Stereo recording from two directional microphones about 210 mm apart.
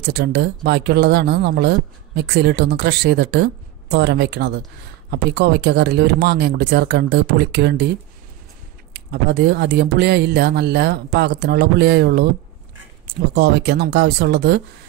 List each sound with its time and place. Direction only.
0.0 s speech: 50° right (ahead or behind)
8.9 s speech: 50° right (ahead or behind)